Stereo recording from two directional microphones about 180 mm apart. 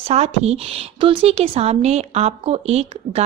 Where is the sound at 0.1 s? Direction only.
35° right (ahead or behind).